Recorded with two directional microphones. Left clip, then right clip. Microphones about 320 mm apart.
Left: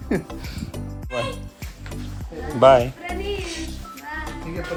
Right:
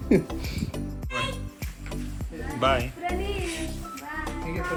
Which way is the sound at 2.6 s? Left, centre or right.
Left.